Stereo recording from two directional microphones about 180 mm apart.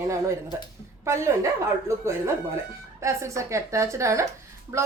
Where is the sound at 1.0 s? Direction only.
15° right (ahead or behind).